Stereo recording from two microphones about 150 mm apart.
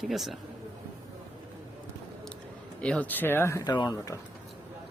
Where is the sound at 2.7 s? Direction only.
10° left (ahead or behind); by 4.2 s 25° left (ahead or behind).